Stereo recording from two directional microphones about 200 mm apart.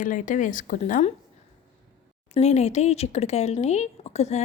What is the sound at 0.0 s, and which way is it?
Speech, 40° left (ahead or behind).